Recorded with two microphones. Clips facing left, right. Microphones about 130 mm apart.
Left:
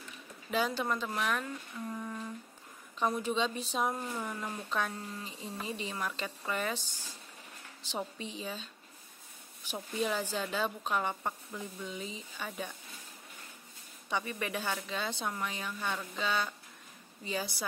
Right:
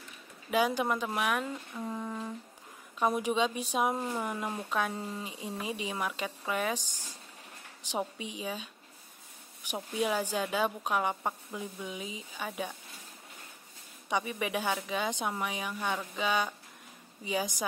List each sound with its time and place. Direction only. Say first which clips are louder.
0.5 s speech: right 4 dB; 15° right (ahead or behind)
9.9 s speech: right 3 dB; 15° right (ahead or behind)
14.0 s speech: right 3 dB; 15° right (ahead or behind)